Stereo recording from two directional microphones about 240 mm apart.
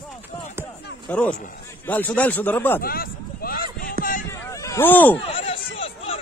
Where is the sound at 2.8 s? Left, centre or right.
Left.